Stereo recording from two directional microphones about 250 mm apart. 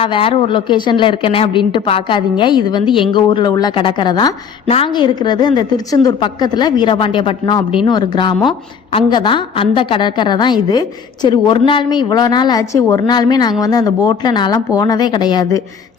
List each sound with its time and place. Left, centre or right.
0.0 s a woman's voice: centre